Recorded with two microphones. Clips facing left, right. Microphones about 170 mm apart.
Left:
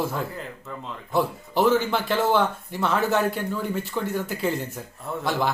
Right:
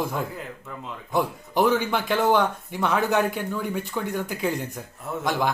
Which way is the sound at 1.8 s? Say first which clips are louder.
Even; 15° right (ahead or behind).